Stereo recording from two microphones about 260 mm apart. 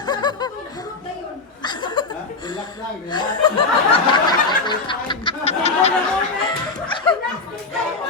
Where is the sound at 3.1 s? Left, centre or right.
Centre.